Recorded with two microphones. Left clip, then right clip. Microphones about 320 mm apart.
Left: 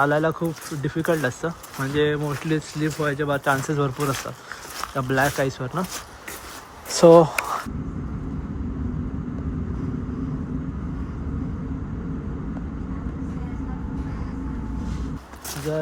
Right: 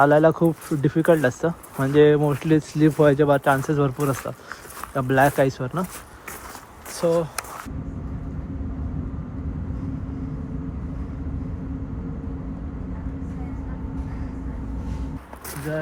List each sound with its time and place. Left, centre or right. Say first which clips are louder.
0.0 s speech: right 5 dB; centre
6.9 s speech: left 10 dB; left